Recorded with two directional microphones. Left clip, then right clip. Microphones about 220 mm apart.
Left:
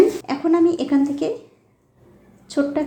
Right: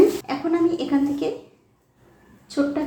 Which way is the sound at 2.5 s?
40° left (ahead or behind).